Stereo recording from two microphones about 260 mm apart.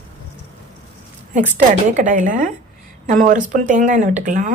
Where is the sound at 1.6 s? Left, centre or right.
Right.